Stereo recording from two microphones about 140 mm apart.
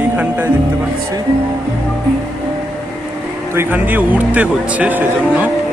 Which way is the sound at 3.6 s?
15° right (ahead or behind).